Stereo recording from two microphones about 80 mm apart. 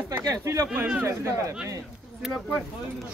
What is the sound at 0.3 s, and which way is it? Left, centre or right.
Speech, right.